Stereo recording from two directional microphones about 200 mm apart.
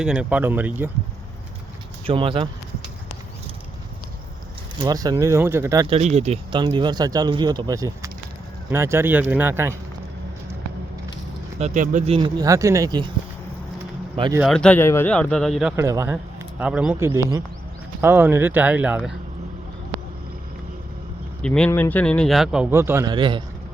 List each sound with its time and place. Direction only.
0.0 s speech: 5° right (ahead or behind)
2.0 s speech: 25° right (ahead or behind)
4.8 s speech: 20° right (ahead or behind)
5.9 s speech: 35° right (ahead or behind); by 9.7 s 10° right (ahead or behind)
11.6 s speech: 40° right (ahead or behind); by 13.1 s 20° right (ahead or behind)
14.4 s a man's voice: 5° left (ahead or behind)
15.7 s speech: 15° right (ahead or behind)
21.4 s a man's voice: 5° left (ahead or behind); by 23.4 s 25° right (ahead or behind)